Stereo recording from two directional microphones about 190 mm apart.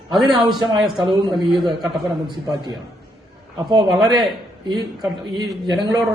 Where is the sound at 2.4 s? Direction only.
20° right (ahead or behind).